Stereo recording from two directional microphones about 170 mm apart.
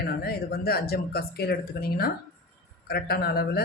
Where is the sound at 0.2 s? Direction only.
65° left (ahead or behind).